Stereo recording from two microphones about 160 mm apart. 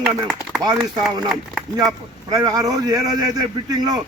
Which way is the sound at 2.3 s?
20° right (ahead or behind).